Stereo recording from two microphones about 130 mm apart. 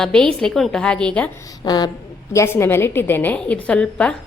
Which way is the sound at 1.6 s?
30° left (ahead or behind).